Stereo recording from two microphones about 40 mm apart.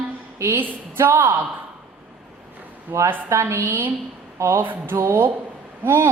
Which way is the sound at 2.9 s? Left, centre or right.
Right.